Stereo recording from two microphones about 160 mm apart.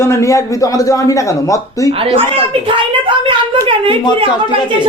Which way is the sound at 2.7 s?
30° right (ahead or behind).